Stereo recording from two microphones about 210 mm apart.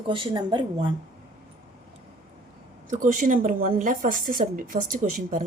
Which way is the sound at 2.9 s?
40° right (ahead or behind).